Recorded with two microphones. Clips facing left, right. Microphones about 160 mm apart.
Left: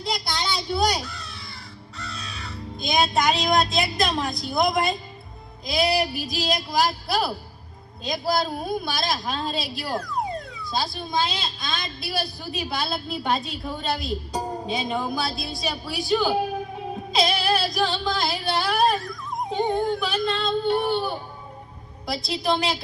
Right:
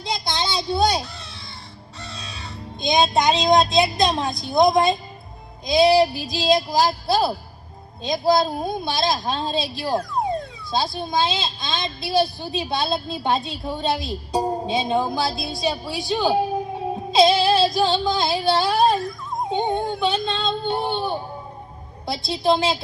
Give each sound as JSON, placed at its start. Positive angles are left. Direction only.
{"t": 0.0, "sound": "child singing", "side_deg": -20}
{"t": 2.0, "sound": "crow", "side_deg": -20}
{"t": 3.2, "sound": "speech", "side_deg": -20}
{"t": 16.9, "sound": "female singing", "side_deg": -25}
{"t": 19.4, "sound": "speech", "side_deg": -20}